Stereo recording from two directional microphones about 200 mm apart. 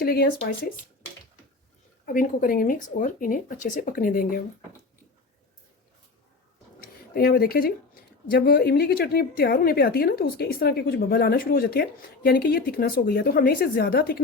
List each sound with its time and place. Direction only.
0.0 s a woman's voice: 50° left (ahead or behind)
2.0 s a woman's voice: 45° left (ahead or behind)
6.7 s a sound: 50° left (ahead or behind)
8.3 s a woman's voice: 50° left (ahead or behind)